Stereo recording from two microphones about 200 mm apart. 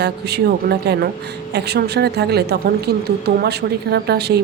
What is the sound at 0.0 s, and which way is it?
A woman's voice, 55° right (ahead or behind).